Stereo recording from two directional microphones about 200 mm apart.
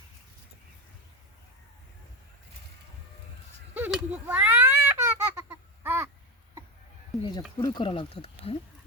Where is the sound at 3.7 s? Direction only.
5° right (ahead or behind).